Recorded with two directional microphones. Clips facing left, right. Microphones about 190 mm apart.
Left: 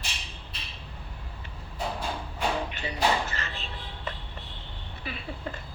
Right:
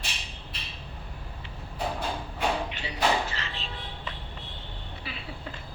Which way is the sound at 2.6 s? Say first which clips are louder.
Even; 45° left (ahead or behind).